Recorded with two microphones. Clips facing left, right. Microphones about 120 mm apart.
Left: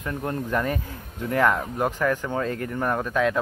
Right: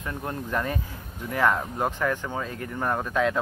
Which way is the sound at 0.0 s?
15° right (ahead or behind).